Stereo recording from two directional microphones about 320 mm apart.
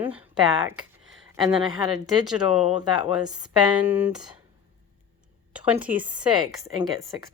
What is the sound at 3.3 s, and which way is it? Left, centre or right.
Speech, centre.